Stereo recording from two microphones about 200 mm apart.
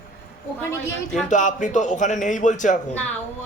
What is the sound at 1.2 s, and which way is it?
A man's voice, 40° left (ahead or behind).